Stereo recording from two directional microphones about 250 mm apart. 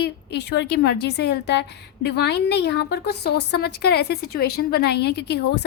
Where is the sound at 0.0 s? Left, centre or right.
Left.